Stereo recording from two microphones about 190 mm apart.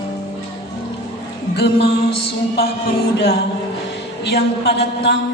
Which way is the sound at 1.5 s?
60° left (ahead or behind).